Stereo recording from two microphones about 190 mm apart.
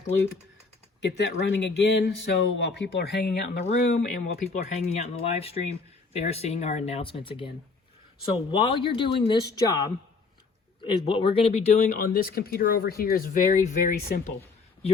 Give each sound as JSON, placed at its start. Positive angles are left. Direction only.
{"t": 1.0, "sound": "speech", "side_deg": 65}
{"t": 3.8, "sound": "speech", "side_deg": 50}
{"t": 10.8, "sound": "speech", "side_deg": 25}